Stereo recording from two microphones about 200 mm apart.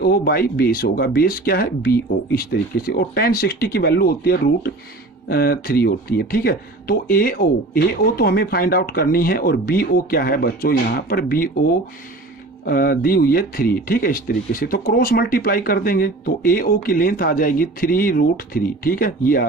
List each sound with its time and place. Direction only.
0.0 s speech: 50° left (ahead or behind)